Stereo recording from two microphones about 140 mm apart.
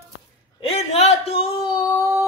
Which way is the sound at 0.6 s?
45° left (ahead or behind).